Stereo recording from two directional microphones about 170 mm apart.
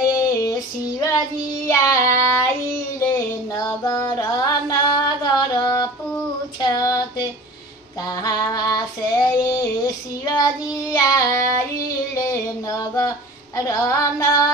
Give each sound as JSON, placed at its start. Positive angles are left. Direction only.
{"t": 0.4, "sound": "female singing", "side_deg": 20}
{"t": 1.7, "sound": "child singing", "side_deg": 15}
{"t": 3.5, "sound": "music", "side_deg": 20}
{"t": 6.6, "sound": "female singing", "side_deg": 20}
{"t": 8.1, "sound": "child singing", "side_deg": 20}
{"t": 12.2, "sound": "a sound", "side_deg": 20}
{"t": 13.6, "sound": "female singing", "side_deg": 20}